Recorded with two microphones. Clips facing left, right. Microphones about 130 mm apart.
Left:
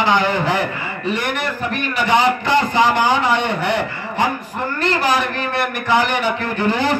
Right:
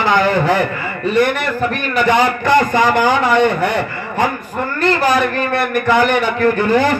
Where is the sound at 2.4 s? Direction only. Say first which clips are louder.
Right 3 dB; 50° right (ahead or behind).